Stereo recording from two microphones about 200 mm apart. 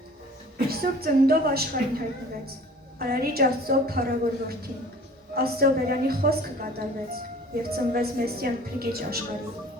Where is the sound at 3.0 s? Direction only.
50° right (ahead or behind).